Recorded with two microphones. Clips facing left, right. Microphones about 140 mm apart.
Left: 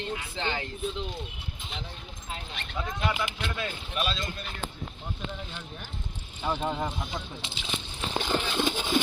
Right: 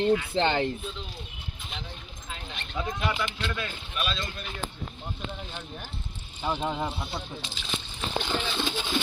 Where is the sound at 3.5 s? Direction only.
30° left (ahead or behind).